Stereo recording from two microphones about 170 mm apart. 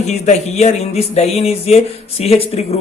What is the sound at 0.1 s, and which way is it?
Speech, 40° left (ahead or behind).